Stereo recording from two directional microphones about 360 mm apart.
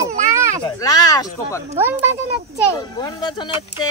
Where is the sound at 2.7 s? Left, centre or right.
Centre.